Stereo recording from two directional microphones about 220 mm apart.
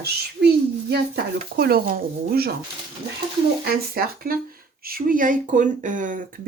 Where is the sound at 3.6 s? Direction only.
45° right (ahead or behind).